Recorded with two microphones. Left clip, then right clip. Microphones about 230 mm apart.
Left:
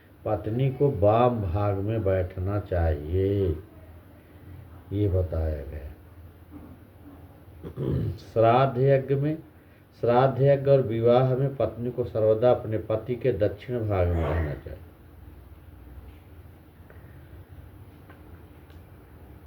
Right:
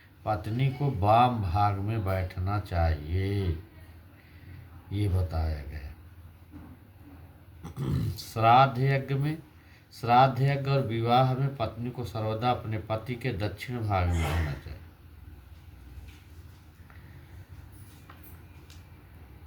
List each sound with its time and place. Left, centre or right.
0.3 s speech: right
4.9 s speech: right
7.6 s speech: right